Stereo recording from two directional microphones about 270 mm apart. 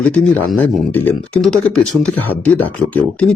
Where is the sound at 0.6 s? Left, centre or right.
Centre.